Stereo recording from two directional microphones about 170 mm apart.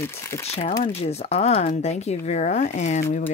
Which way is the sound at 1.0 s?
40° left (ahead or behind).